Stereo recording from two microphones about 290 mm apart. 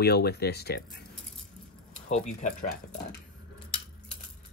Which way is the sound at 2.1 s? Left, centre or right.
Left.